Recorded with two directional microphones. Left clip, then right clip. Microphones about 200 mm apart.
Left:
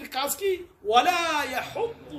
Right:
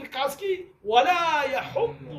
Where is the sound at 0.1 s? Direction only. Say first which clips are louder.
Even; 20° left (ahead or behind).